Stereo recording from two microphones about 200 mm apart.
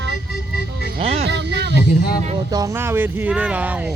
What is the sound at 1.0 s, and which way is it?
Music, 30° right (ahead or behind).